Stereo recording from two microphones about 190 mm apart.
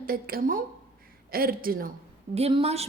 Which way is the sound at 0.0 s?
50° right (ahead or behind).